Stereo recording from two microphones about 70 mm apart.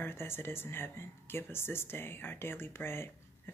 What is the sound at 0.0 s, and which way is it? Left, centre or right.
Speech, left.